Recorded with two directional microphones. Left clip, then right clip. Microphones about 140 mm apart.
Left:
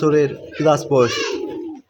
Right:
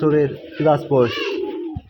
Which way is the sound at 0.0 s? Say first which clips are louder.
Left 1 dB; 10° left (ahead or behind).